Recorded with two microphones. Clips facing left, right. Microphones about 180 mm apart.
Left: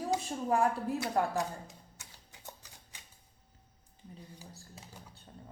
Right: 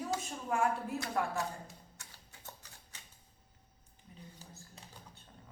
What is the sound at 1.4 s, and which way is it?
Music, 20° left (ahead or behind).